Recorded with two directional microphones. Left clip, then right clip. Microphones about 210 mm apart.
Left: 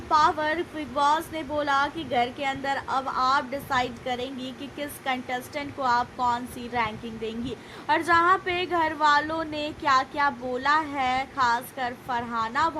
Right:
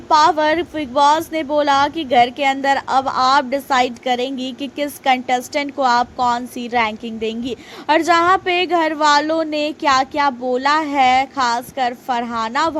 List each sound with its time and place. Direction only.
0.1 s speech: 30° right (ahead or behind)